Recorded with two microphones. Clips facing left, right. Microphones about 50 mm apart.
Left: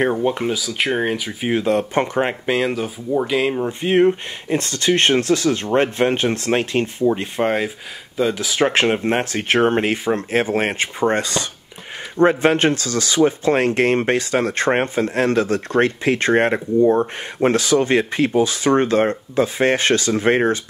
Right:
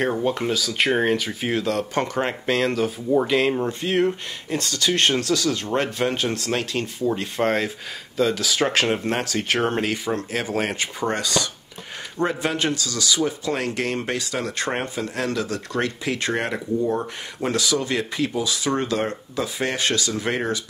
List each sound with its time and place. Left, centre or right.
0.1 s speech: centre
1.5 s speech: left
3.1 s speech: centre
3.6 s speech: left
7.1 s speech: centre; by 20.6 s left